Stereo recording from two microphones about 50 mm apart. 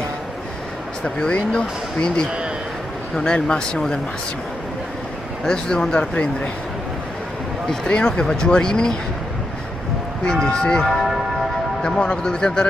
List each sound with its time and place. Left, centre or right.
1.0 s speech: centre
5.4 s speech: centre
7.6 s speech: centre
10.2 s speech: centre